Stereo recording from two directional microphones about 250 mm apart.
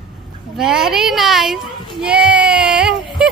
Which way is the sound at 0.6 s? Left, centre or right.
Centre.